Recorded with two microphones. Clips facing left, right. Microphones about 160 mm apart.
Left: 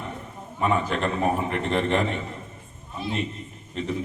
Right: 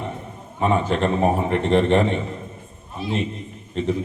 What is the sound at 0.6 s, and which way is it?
A man's voice, 30° right (ahead or behind).